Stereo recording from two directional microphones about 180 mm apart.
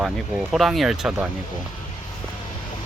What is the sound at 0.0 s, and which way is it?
Speech, centre (ahead or behind).